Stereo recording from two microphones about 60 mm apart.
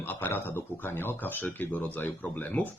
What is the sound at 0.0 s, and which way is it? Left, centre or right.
A man's voice, left.